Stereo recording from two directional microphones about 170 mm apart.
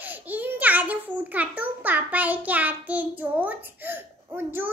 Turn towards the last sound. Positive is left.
turn(degrees=-10)  # may be behind; listen again after turning